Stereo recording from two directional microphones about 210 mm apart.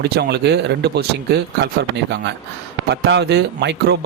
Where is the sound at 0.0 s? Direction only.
50° right (ahead or behind).